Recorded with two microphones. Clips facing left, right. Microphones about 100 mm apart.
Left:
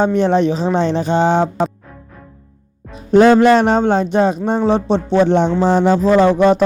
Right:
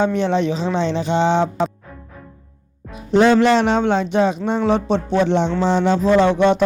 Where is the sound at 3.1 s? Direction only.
45° left (ahead or behind).